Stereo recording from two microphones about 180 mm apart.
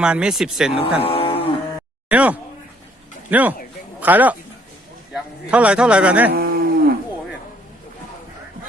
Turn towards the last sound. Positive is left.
turn(degrees=-55)  # may be behind; listen again after turning